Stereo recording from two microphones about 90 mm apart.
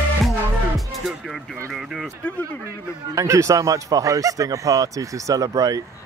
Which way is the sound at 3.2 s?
35° right (ahead or behind).